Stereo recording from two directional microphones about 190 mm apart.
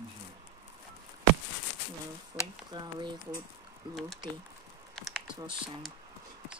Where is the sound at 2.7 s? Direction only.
20° right (ahead or behind).